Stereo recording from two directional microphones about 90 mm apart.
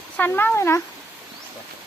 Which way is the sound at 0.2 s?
20° left (ahead or behind).